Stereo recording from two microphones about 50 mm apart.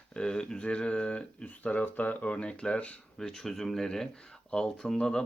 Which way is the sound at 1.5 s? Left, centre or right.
Left.